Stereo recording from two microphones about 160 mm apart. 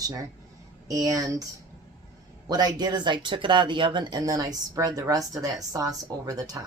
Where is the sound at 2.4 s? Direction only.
25° right (ahead or behind).